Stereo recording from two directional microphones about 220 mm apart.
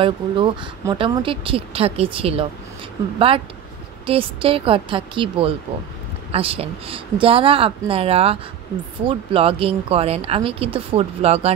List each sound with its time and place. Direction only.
0.0 s speech: 20° right (ahead or behind)
4.0 s speech: 25° right (ahead or behind)